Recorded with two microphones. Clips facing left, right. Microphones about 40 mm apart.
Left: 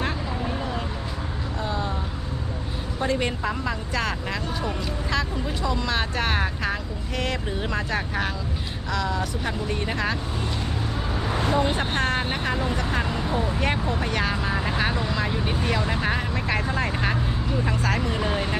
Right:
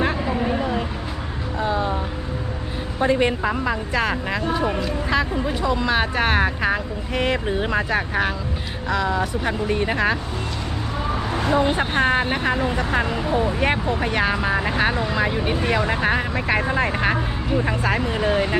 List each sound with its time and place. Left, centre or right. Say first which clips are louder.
0.3 s vehicle: right 6 dB; right
1.5 s a sound: right 7 dB; centre
3.0 s speech: right 6 dB; centre
11.4 s speech: right 4 dB; centre